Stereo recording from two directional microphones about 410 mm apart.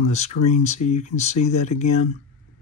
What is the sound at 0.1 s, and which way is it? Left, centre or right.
Speech, centre.